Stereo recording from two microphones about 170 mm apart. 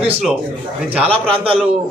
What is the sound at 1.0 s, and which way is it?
Speech, 35° right (ahead or behind).